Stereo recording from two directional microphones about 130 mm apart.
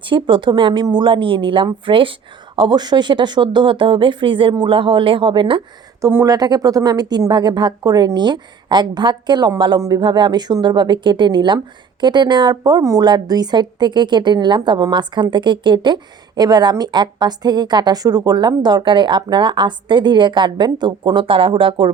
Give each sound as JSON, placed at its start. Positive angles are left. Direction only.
{"t": 0.0, "sound": "a woman's voice", "side_deg": -40}
{"t": 6.0, "sound": "a woman's voice", "side_deg": -20}